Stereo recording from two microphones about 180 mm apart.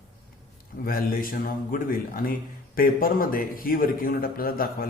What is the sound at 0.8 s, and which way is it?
A man's voice, 55° left (ahead or behind).